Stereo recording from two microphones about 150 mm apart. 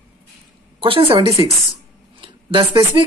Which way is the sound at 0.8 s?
35° right (ahead or behind).